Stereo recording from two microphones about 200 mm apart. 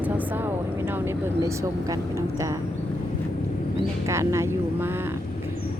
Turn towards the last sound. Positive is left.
turn(degrees=-15)  # may be behind; listen again after turning